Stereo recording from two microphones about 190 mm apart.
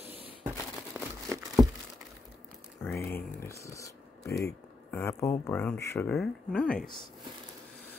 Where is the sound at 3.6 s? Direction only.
15° left (ahead or behind).